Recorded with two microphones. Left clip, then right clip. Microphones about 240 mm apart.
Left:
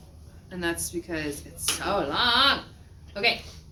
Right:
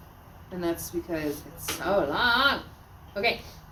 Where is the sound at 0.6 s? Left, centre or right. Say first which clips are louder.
Even; centre.